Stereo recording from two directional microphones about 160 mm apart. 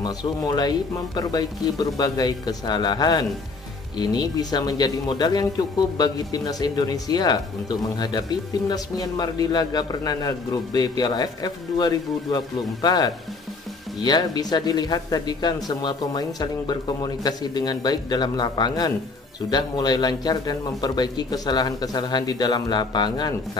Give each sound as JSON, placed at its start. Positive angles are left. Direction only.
{"t": 0.0, "sound": "a man's voice", "side_deg": 25}